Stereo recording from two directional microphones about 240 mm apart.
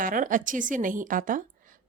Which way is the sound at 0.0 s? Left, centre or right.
Right.